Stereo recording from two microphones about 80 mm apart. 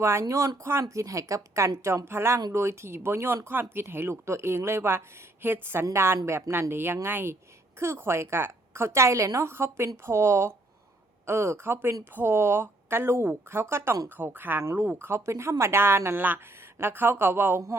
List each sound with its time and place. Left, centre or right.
0.0 s speech: right
14.2 s speech: right